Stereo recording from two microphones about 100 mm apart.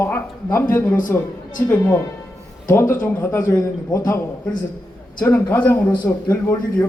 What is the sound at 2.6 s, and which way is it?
A man's voice, 25° left (ahead or behind).